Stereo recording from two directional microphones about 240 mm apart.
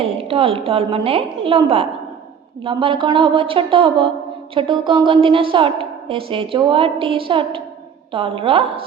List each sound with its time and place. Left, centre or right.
0.0 s a woman's voice: right